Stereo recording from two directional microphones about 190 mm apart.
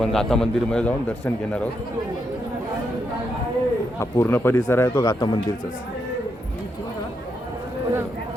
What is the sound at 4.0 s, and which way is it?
Speech, 15° left (ahead or behind).